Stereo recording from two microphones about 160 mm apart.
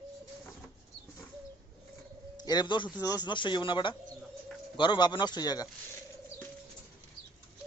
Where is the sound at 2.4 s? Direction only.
25° left (ahead or behind).